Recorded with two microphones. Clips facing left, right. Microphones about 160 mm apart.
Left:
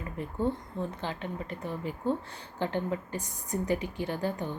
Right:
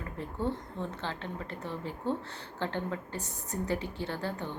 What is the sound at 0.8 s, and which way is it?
A woman's voice, 15° left (ahead or behind).